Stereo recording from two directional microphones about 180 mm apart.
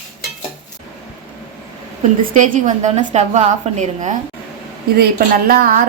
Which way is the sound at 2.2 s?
45° right (ahead or behind).